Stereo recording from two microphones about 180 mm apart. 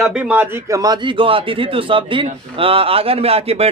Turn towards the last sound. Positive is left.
turn(degrees=-35)  # may be behind; listen again after turning